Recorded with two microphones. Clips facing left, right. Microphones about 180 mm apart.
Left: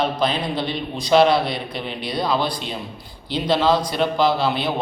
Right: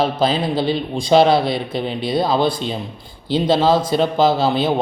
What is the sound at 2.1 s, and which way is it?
A man's voice, 25° right (ahead or behind).